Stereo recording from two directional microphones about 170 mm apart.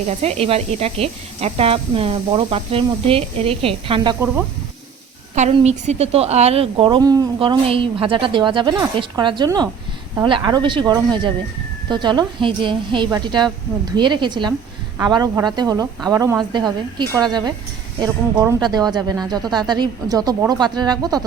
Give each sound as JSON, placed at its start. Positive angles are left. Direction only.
{"t": 0.2, "sound": "speech", "side_deg": -35}
{"t": 5.3, "sound": "a woman's voice", "side_deg": -40}